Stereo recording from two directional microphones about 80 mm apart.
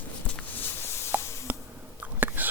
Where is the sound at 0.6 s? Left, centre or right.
Left.